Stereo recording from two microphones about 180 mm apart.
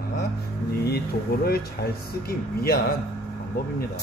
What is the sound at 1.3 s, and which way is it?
Speech, 55° left (ahead or behind).